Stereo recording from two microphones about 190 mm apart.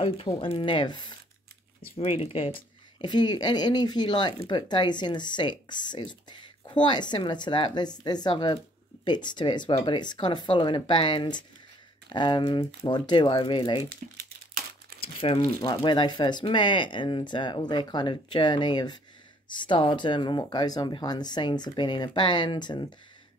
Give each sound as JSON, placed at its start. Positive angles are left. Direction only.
{"t": 0.0, "sound": "speech", "side_deg": 30}
{"t": 15.3, "sound": "speech", "side_deg": 20}